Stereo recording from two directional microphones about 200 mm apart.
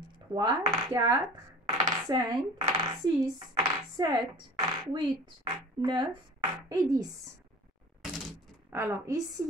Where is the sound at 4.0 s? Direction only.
20° right (ahead or behind).